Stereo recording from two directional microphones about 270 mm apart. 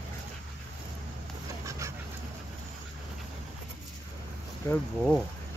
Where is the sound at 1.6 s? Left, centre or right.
Centre.